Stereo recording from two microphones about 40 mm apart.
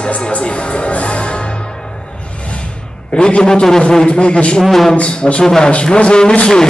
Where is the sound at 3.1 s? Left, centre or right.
Left.